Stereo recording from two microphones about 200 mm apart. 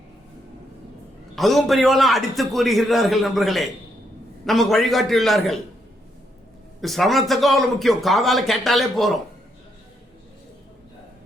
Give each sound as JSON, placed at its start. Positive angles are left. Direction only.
{"t": 1.4, "sound": "a man's voice", "side_deg": 0}
{"t": 6.8, "sound": "a man's voice", "side_deg": 0}